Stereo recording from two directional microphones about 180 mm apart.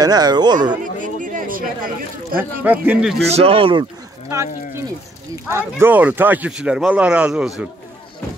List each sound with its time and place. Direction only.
0.0 s speech: 20° right (ahead or behind)
0.9 s speech: 45° right (ahead or behind)
2.3 s speech: 10° right (ahead or behind)
3.3 s speech: 35° right (ahead or behind)
4.3 s speech: 15° right (ahead or behind)